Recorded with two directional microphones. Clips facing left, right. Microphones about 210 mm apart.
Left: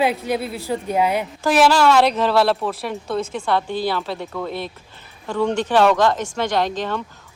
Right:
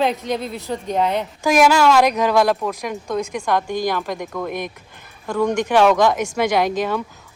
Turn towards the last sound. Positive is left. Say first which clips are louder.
# right 3 dB
turn(degrees=-10)  # may be behind; listen again after turning